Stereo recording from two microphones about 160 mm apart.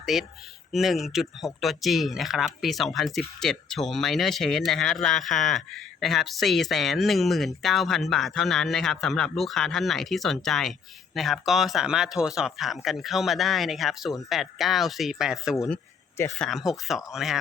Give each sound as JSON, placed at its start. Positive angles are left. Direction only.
{"t": 0.0, "sound": "a man's voice", "side_deg": 0}